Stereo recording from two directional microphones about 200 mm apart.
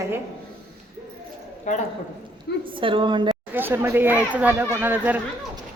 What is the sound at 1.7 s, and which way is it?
Speech, 40° left (ahead or behind).